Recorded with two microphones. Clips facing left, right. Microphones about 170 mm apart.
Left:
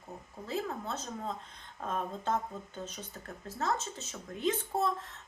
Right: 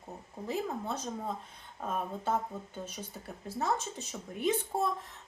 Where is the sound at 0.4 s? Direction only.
15° right (ahead or behind).